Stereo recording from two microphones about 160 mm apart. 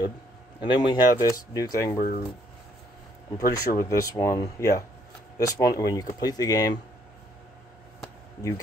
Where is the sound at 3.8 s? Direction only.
20° left (ahead or behind).